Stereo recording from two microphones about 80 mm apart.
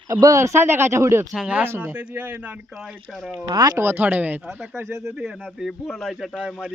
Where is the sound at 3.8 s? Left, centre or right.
Right.